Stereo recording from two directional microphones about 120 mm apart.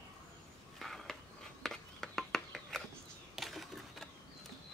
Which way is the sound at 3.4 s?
Centre (ahead or behind).